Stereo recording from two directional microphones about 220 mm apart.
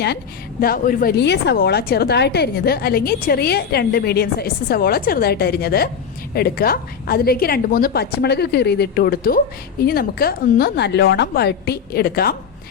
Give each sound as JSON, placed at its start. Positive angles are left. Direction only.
{"t": 0.6, "sound": "a woman's voice", "side_deg": 40}